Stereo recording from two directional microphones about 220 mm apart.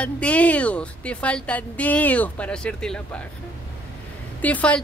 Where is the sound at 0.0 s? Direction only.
5° left (ahead or behind).